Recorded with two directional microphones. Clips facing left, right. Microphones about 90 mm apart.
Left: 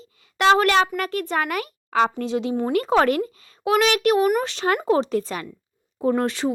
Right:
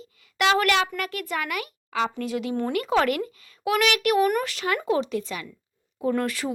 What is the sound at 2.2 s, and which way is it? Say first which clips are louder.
A child's voice: left 3 dB; 25° left (ahead or behind).